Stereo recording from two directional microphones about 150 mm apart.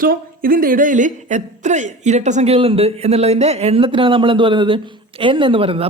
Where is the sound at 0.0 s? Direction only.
70° right (ahead or behind).